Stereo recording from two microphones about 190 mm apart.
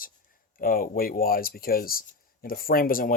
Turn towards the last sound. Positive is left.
turn(degrees=50)  # may be behind; listen again after turning